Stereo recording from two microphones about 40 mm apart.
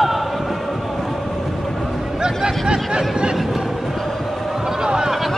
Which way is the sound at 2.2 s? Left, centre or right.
Centre.